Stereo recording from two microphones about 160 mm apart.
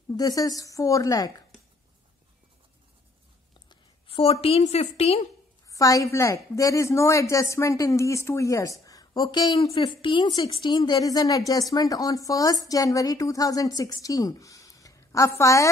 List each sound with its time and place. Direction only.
0.1 s speech: 25° left (ahead or behind)
3.6 s a woman's voice: 35° left (ahead or behind)
5.7 s speech: 20° left (ahead or behind)